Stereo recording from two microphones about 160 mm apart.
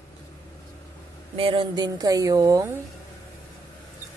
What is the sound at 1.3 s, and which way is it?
A woman's voice, 35° right (ahead or behind).